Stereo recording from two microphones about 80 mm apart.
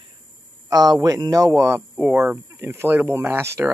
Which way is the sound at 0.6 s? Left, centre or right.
Right.